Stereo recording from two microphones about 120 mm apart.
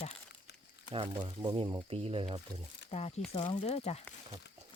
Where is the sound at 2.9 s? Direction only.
60° left (ahead or behind).